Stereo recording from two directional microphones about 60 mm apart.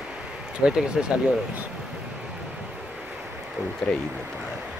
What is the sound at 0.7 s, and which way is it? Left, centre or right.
Speech, centre.